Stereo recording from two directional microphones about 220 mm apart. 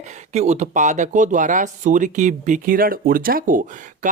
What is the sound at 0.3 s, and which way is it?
Speech, 30° right (ahead or behind).